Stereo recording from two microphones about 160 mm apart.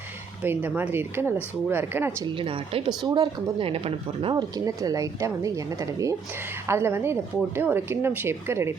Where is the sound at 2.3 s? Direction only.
35° right (ahead or behind).